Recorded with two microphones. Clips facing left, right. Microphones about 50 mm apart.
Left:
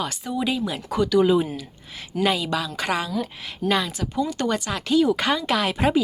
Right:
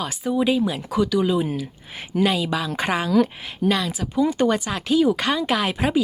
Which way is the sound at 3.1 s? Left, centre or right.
Right.